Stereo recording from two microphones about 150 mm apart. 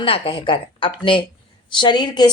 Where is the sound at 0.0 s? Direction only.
35° left (ahead or behind).